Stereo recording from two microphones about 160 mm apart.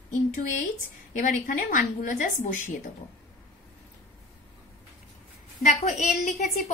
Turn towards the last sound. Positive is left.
turn(degrees=45)  # may be behind; listen again after turning